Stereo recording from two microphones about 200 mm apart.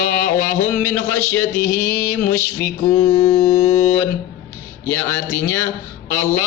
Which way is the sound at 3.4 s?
35° left (ahead or behind).